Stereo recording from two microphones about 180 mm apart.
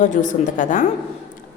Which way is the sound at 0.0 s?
45° left (ahead or behind).